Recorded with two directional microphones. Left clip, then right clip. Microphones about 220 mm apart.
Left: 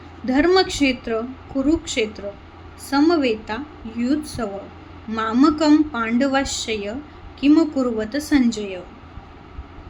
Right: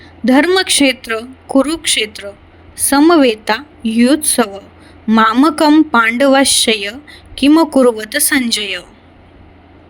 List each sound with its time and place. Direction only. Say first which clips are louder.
0.3 s a woman's voice: right 6 dB; 45° right (ahead or behind)